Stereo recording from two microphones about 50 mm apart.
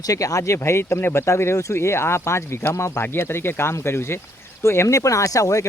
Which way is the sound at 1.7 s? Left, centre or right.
Left.